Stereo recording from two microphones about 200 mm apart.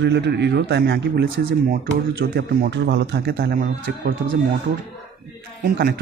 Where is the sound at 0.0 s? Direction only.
60° right (ahead or behind).